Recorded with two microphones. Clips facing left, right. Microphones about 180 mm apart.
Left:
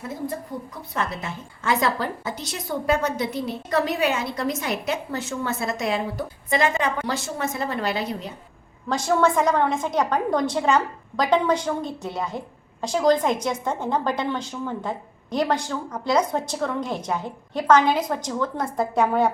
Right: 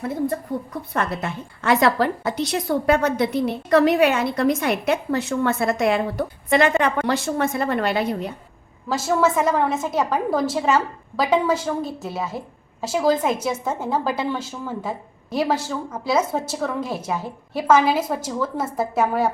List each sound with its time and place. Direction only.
0.9 s a woman's voice: 60° right (ahead or behind)
8.9 s a woman's voice: 5° right (ahead or behind)